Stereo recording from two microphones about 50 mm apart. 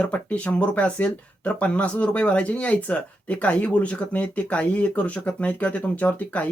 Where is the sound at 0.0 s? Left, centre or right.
Left.